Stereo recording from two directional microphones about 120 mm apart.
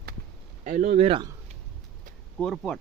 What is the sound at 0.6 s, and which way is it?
Speech, 90° right.